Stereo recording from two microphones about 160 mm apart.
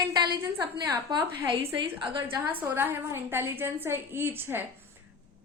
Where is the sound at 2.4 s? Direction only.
10° right (ahead or behind).